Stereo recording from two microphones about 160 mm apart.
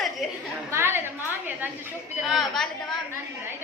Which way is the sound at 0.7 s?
15° right (ahead or behind).